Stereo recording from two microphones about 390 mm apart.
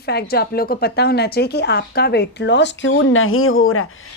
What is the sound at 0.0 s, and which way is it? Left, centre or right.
A woman's voice, left.